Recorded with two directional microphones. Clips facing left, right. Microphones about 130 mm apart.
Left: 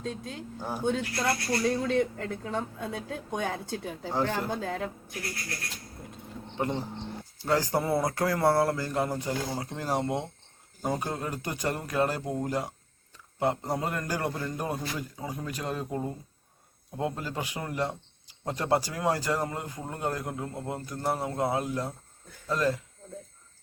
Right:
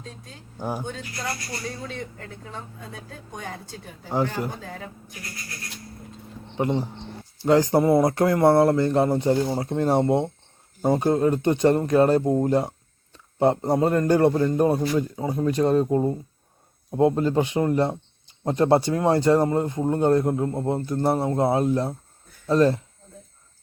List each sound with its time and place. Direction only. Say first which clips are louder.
0.0 s speech: left 7 dB; 70° left (ahead or behind)
6.6 s a man's voice: right 6 dB; 15° right (ahead or behind)